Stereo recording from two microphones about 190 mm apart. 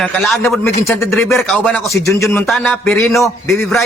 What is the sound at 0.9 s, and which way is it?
Speech, 15° left (ahead or behind).